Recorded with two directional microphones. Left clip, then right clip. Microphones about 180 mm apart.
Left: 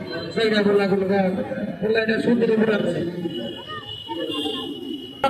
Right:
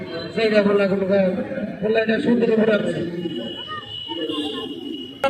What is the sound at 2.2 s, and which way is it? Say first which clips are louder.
Speech: right 1 dB; 15° left (ahead or behind).